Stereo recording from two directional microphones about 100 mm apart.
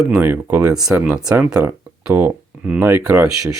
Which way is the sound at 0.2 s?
20° right (ahead or behind).